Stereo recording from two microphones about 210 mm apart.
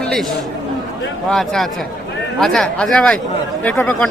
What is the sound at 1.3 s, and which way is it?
Speech, centre (ahead or behind).